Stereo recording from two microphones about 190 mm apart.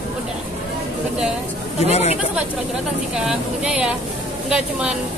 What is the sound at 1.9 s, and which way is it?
Speech, 35° left (ahead or behind).